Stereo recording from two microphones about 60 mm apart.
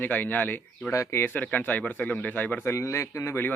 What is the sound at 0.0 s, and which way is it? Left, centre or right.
Speech, left.